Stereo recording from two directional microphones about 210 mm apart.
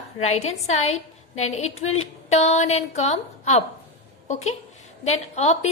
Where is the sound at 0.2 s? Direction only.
30° left (ahead or behind).